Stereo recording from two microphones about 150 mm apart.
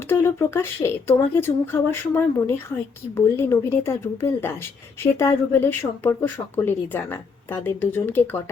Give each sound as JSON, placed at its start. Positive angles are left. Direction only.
{"t": 0.1, "sound": "speech", "side_deg": 15}